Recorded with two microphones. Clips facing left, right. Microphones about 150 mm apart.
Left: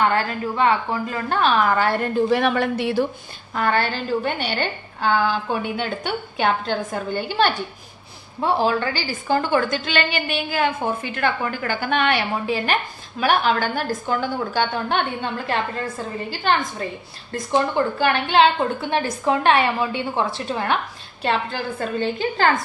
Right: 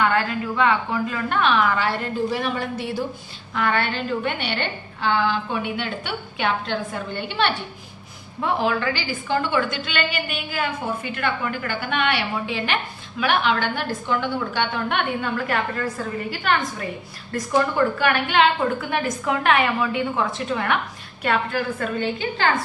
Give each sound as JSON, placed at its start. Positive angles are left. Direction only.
{"t": 0.0, "sound": "a woman's voice", "side_deg": 30}
{"t": 3.5, "sound": "a woman's voice", "side_deg": 40}